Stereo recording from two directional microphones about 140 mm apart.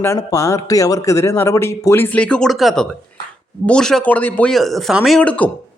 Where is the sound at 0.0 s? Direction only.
20° left (ahead or behind).